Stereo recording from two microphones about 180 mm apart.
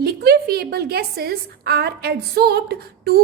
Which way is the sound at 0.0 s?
60° right (ahead or behind).